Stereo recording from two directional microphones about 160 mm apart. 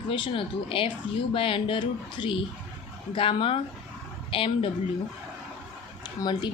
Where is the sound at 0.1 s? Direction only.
35° left (ahead or behind).